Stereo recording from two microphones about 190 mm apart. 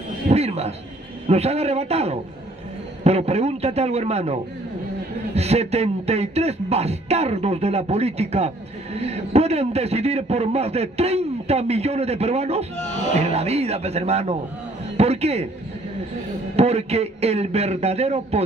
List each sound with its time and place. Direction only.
0.3 s a sound: 35° right (ahead or behind)
1.2 s speech: 35° right (ahead or behind)
12.7 s speech: 35° left (ahead or behind)
13.1 s speech: 35° right (ahead or behind)
16.5 s speech: 35° right (ahead or behind)